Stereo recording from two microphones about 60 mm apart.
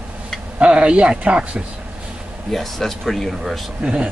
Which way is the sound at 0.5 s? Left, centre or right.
Centre.